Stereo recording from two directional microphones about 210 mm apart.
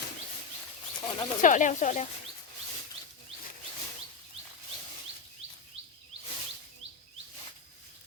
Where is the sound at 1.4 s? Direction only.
35° left (ahead or behind).